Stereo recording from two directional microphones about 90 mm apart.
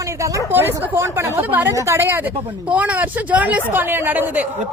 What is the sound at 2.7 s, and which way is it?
A woman's voice, 15° right (ahead or behind).